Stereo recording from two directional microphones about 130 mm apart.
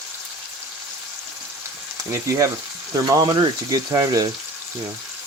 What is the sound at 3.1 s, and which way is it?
Speech, 30° right (ahead or behind).